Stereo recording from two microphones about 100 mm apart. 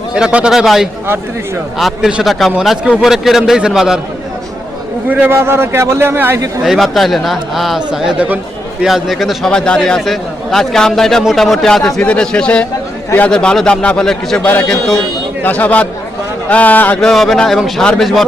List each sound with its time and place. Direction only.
0.1 s a man's voice: 10° right (ahead or behind)
5.0 s a man's voice: 20° right (ahead or behind)
6.7 s a man's voice: centre (ahead or behind)
14.4 s a man's voice: 20° left (ahead or behind)
17.0 s a man's voice: 5° left (ahead or behind)